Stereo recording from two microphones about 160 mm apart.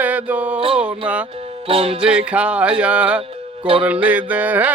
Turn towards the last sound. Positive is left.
turn(degrees=-10)  # may be behind; listen again after turning